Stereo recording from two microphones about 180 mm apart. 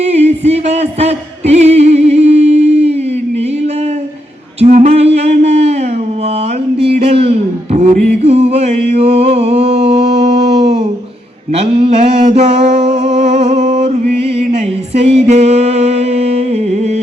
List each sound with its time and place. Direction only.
0.0 s music: 35° right (ahead or behind)
4.6 s music: 40° right (ahead or behind)
6.8 s music: 35° right (ahead or behind)
9.8 s a sound: 30° right (ahead or behind)
14.9 s music: 35° right (ahead or behind)